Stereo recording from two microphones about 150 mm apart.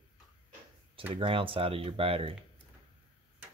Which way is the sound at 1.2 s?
35° right (ahead or behind).